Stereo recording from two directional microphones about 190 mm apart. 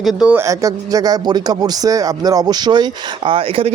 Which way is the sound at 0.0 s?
Centre (ahead or behind).